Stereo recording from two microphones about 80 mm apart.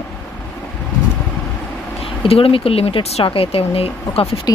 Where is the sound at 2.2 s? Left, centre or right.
Left.